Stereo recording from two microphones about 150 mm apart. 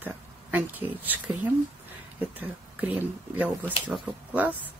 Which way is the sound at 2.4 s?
10° right (ahead or behind).